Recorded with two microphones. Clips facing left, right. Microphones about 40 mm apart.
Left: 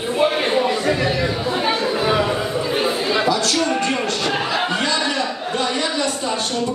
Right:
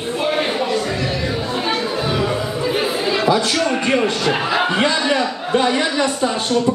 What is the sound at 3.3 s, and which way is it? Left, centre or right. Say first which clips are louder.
A man's voice: right 2 dB; right.